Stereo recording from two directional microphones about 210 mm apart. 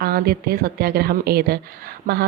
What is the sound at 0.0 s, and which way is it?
A woman's voice, 45° right (ahead or behind).